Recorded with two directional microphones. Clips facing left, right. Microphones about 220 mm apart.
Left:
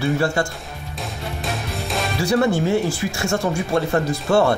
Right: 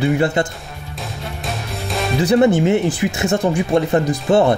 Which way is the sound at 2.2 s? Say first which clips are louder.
Right 5 dB; 20° right (ahead or behind).